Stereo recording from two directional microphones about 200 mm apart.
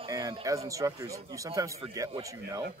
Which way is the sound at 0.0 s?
20° right (ahead or behind).